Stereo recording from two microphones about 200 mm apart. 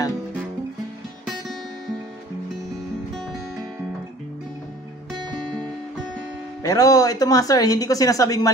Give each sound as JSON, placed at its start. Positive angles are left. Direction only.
{"t": 6.6, "sound": "speech", "side_deg": 15}